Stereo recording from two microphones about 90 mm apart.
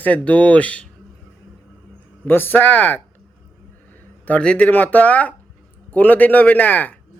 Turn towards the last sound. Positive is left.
turn(degrees=20)  # may be behind; listen again after turning